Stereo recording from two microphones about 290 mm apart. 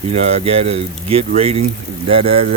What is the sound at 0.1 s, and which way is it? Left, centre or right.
Speech, right.